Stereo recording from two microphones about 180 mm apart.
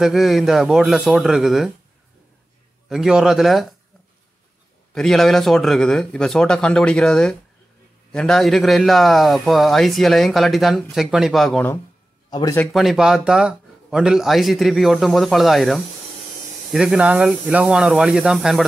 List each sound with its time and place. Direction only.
0.0 s a man's voice: centre (ahead or behind)
2.9 s a man's voice: 5° right (ahead or behind)
4.9 s a man's voice: centre (ahead or behind)
12.3 s a man's voice: 20° left (ahead or behind)
12.5 s a man's voice: centre (ahead or behind)